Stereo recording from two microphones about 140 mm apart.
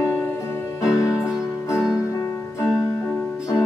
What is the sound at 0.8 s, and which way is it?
Music, 20° left (ahead or behind).